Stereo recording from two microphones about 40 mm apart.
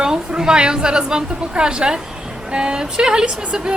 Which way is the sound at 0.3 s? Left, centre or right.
Centre.